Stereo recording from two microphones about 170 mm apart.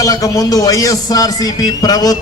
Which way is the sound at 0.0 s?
20° left (ahead or behind).